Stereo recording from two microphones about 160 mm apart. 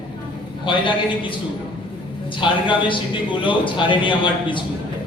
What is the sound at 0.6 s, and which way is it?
Speech, 30° left (ahead or behind).